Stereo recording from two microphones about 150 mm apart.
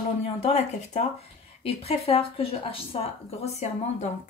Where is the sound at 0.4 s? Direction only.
45° left (ahead or behind).